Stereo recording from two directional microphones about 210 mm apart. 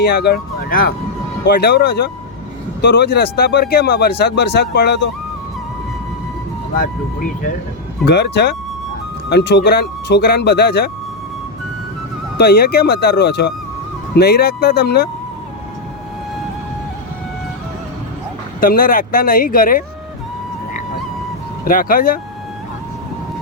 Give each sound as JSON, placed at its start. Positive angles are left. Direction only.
{"t": 0.0, "sound": "speech", "side_deg": 50}
{"t": 6.7, "sound": "speech", "side_deg": 40}
{"t": 8.0, "sound": "speech", "side_deg": 55}
{"t": 12.4, "sound": "speech", "side_deg": 50}
{"t": 18.6, "sound": "speech", "side_deg": 40}
{"t": 21.6, "sound": "speech", "side_deg": 40}